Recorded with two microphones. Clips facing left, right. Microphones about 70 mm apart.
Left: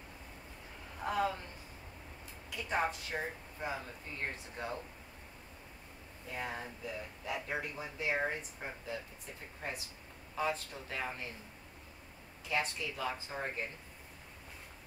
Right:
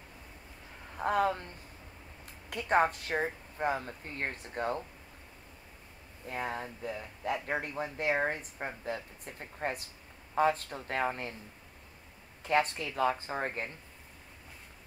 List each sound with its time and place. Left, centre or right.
0.9 s speech: right
2.5 s speech: right
6.2 s speech: right
12.4 s speech: right